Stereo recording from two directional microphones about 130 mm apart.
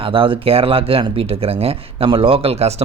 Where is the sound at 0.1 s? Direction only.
45° right (ahead or behind).